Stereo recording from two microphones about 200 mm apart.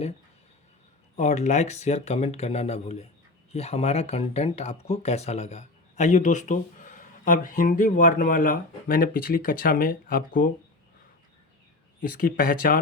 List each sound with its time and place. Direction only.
1.1 s speech: 35° left (ahead or behind)
12.2 s speech: 45° left (ahead or behind)